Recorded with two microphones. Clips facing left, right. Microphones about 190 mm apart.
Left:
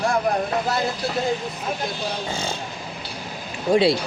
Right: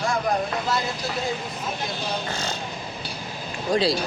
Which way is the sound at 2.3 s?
10° left (ahead or behind).